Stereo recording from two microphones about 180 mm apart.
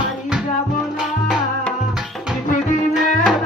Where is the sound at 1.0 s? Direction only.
Centre (ahead or behind).